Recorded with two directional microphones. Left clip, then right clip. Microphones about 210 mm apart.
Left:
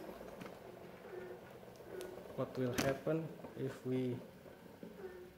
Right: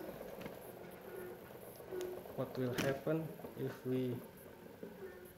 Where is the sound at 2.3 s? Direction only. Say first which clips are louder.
Left 2 dB; 10° left (ahead or behind).